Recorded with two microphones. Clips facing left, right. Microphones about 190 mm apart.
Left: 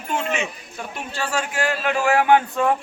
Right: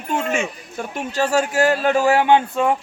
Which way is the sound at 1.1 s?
40° right (ahead or behind).